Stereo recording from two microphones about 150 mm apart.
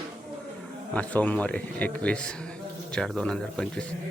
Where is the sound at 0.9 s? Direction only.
10° left (ahead or behind).